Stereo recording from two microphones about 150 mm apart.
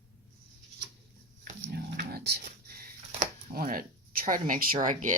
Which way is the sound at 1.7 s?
90° right.